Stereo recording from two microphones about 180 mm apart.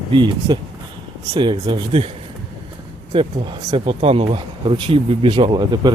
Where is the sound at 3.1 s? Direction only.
30° right (ahead or behind).